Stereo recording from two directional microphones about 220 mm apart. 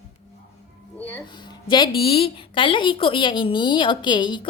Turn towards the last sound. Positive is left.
turn(degrees=20)  # may be behind; listen again after turning